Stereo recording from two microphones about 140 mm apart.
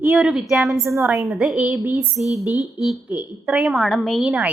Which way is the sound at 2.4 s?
25° left (ahead or behind).